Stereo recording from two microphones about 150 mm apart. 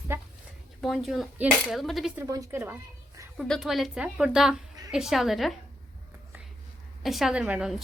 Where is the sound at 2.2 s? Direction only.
20° right (ahead or behind).